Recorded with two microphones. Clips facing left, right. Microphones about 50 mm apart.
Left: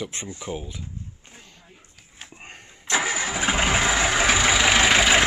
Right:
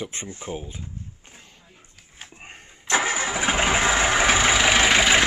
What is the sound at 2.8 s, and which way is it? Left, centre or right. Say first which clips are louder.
Vehicle: right 2 dB; right.